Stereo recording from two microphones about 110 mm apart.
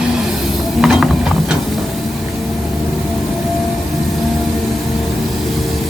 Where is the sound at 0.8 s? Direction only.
Centre (ahead or behind).